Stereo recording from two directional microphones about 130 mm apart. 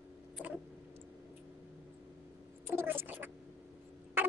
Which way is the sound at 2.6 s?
15° right (ahead or behind).